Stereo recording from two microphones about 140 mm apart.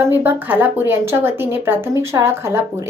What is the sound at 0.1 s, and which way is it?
Speech, 15° right (ahead or behind).